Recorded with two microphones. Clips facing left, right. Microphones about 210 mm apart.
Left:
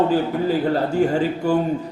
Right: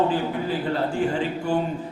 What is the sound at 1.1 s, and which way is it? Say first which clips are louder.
Speech: left 5 dB; 40° left (ahead or behind).